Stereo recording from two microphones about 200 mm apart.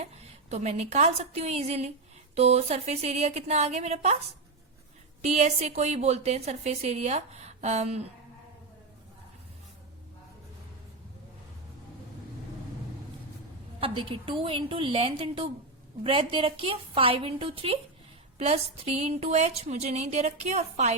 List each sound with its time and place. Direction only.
0.0 s a woman's voice: 35° right (ahead or behind)
5.2 s a woman's voice: 35° right (ahead or behind)
13.7 s a woman's voice: 25° right (ahead or behind)